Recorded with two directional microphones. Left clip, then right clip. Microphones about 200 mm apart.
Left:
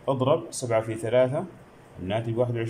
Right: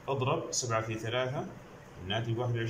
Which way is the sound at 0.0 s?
35° left (ahead or behind).